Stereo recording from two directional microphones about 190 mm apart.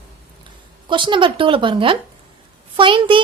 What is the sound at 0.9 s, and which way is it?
Speech, 25° right (ahead or behind).